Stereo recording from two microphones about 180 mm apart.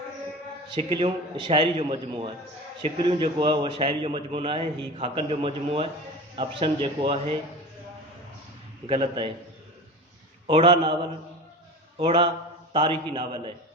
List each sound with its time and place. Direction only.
0.7 s a man's voice: 30° right (ahead or behind)
8.9 s a man's voice: 25° right (ahead or behind)
10.4 s a man's voice: 30° right (ahead or behind)
11.9 s a man's voice: 30° right (ahead or behind)